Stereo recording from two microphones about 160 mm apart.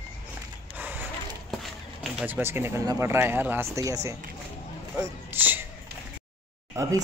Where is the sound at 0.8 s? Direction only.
10° right (ahead or behind).